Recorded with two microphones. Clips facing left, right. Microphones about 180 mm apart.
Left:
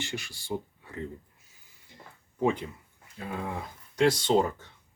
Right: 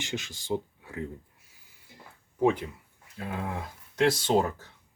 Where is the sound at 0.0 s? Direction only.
20° right (ahead or behind).